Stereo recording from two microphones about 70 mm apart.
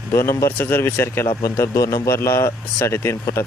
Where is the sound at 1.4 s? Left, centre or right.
Left.